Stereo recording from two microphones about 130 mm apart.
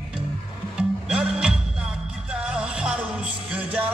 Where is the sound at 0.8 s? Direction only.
5° right (ahead or behind).